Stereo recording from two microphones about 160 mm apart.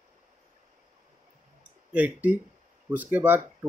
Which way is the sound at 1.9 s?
10° right (ahead or behind).